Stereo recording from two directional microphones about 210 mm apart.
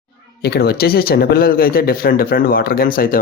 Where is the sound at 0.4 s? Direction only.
50° left (ahead or behind).